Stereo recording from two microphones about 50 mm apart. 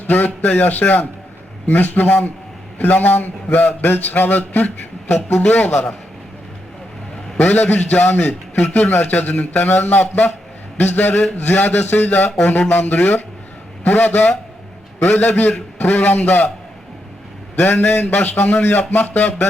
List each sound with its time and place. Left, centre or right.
0.1 s speech: left
7.4 s speech: left
17.6 s speech: left